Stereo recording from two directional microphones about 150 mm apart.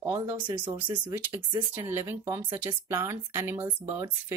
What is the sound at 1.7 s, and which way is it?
Speech, 15° right (ahead or behind).